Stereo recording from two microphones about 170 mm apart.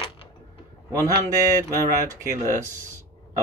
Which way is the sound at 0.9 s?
20° right (ahead or behind).